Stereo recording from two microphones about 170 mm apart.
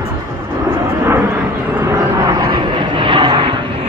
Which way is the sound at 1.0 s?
15° right (ahead or behind).